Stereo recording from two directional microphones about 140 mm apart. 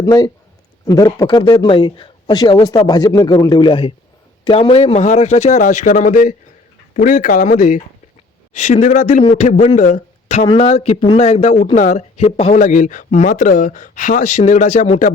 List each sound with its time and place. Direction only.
0.0 s speech: 25° left (ahead or behind); by 10.4 s 55° left (ahead or behind)
10.4 s speech: 40° left (ahead or behind); by 15.1 s 60° left (ahead or behind)